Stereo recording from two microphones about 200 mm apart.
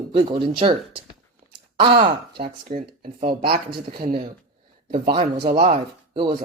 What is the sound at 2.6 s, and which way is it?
Speech, 45° right (ahead or behind).